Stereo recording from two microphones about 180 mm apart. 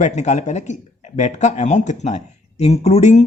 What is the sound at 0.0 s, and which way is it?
Speech, 40° left (ahead or behind).